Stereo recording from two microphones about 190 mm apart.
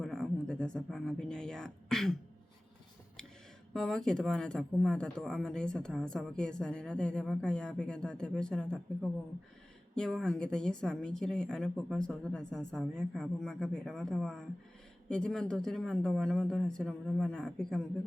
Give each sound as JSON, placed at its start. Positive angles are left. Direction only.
{"t": 0.0, "sound": "speech", "side_deg": 5}
{"t": 3.7, "sound": "speech", "side_deg": 5}